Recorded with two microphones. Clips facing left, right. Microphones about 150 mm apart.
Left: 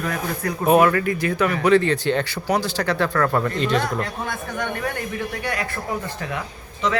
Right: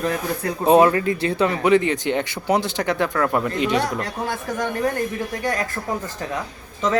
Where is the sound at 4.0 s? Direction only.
35° right (ahead or behind).